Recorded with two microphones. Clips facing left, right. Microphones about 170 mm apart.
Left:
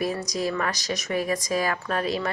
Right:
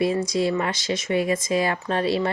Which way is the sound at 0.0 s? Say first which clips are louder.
Right 5 dB; 25° right (ahead or behind).